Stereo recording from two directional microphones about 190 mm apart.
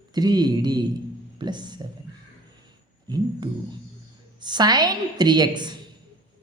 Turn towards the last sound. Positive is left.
turn(degrees=-20)  # may be behind; listen again after turning